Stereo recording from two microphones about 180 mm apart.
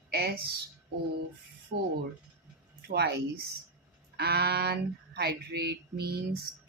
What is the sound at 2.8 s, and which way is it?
Speech, 65° right (ahead or behind).